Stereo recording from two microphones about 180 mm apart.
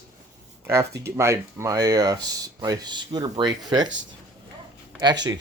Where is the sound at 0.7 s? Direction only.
15° right (ahead or behind).